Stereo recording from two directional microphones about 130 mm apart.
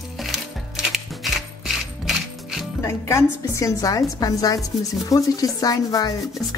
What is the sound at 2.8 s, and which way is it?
Speech, 20° left (ahead or behind).